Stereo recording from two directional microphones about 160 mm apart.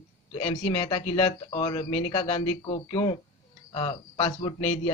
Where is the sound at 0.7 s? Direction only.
25° left (ahead or behind).